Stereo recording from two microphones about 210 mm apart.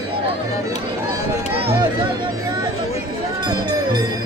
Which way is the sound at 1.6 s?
25° right (ahead or behind).